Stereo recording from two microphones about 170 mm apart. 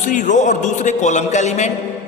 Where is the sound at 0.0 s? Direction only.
45° left (ahead or behind).